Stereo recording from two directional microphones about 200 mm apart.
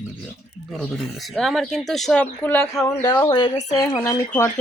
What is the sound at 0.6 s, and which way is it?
Speech, centre (ahead or behind).